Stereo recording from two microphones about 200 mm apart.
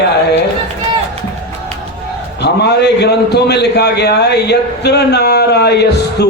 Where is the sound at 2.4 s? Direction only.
55° left (ahead or behind).